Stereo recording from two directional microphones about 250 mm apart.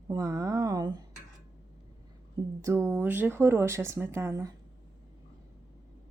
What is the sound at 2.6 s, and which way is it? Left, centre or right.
Speech, centre.